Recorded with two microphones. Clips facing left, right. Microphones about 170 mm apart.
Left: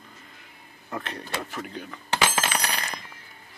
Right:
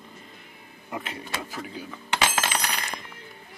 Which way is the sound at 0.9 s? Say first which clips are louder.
Left 1 dB; 10° right (ahead or behind).